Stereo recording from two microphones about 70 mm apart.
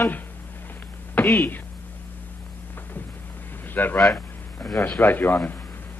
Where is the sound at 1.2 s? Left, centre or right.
Left.